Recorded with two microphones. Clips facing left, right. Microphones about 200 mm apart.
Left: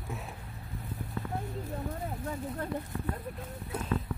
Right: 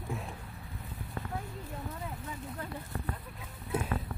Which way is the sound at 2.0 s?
50° left (ahead or behind).